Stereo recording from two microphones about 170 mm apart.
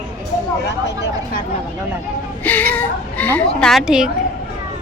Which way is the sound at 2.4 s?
10° left (ahead or behind).